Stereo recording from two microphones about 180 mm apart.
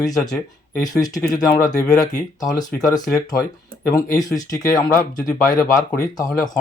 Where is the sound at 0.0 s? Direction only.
20° left (ahead or behind).